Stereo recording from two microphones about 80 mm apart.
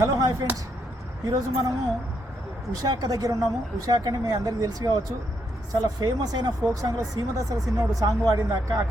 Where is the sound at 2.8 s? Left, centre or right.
Right.